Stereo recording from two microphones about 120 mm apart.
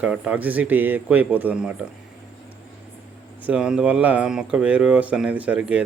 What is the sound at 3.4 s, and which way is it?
Speech, 10° right (ahead or behind).